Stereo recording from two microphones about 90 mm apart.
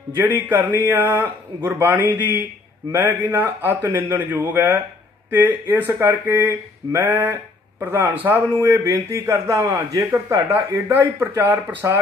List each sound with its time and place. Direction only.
0.5 s a man's voice: 25° right (ahead or behind)
11.8 s speech: 30° right (ahead or behind)